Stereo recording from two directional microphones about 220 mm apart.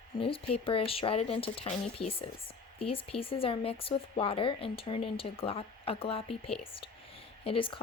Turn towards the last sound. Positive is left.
turn(degrees=25)  # may be behind; listen again after turning